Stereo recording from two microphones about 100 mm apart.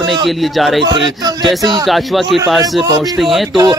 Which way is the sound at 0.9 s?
45° right (ahead or behind).